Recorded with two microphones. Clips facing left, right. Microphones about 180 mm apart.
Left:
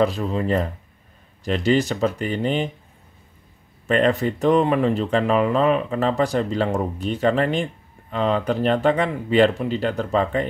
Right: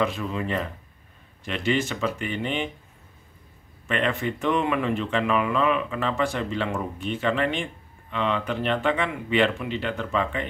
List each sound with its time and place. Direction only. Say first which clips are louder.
0.0 s speech: left 5 dB; 35° left (ahead or behind)
3.8 s speech: left 7 dB; 40° left (ahead or behind)